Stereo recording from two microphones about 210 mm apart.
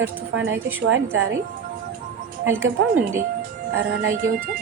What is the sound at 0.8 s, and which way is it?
Speech, 70° right (ahead or behind).